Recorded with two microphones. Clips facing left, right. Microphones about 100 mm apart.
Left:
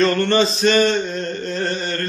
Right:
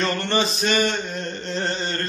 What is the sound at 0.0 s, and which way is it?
Mantra, 15° right (ahead or behind).